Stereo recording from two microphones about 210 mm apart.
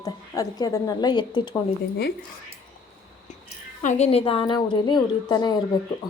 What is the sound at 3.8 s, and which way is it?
A woman's voice, 35° left (ahead or behind).